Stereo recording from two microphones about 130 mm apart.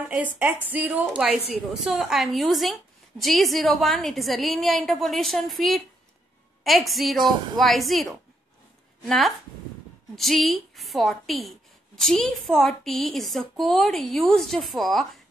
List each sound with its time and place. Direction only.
0.1 s a woman's voice: 15° right (ahead or behind); by 15.2 s centre (ahead or behind)